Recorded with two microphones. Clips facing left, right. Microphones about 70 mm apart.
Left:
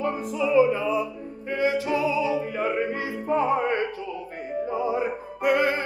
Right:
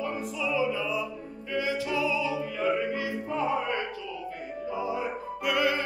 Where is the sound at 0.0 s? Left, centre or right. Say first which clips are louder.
Left 5 dB; left.